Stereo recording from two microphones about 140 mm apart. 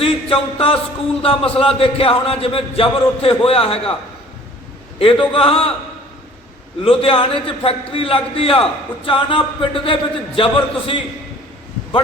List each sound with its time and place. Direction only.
0.0 s music: 40° left (ahead or behind)
1.2 s speech: 40° left (ahead or behind)
4.9 s speech: 40° left (ahead or behind)
6.8 s speech: 40° left (ahead or behind)